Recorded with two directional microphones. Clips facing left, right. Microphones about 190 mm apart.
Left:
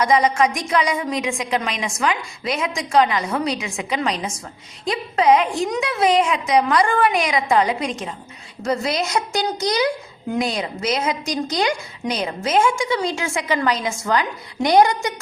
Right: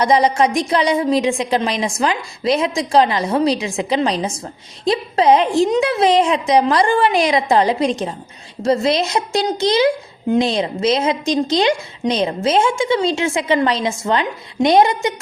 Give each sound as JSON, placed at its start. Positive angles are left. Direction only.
{"t": 0.0, "sound": "a woman's voice", "side_deg": -30}